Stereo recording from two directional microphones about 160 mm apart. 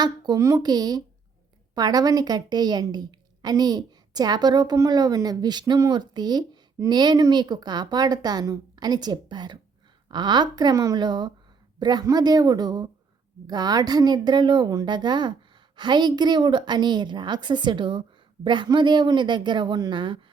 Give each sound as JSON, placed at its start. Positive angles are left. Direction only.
{"t": 0.0, "sound": "a woman's voice", "side_deg": -25}